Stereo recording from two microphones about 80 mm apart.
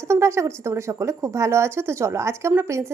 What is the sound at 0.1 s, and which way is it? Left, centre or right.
A woman's voice, right.